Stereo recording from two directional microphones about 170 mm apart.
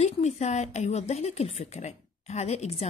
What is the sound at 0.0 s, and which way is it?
Speech, 40° left (ahead or behind).